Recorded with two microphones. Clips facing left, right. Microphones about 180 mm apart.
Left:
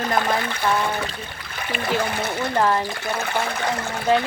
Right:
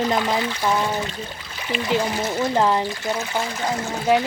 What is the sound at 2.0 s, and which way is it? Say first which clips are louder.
Speech: right 1 dB; 60° left (ahead or behind).